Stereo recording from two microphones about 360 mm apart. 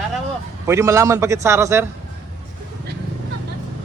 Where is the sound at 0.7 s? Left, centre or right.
Centre.